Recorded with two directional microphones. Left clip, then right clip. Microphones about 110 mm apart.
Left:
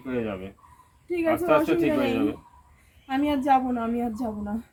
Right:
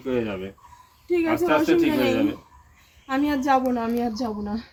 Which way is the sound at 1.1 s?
20° left (ahead or behind).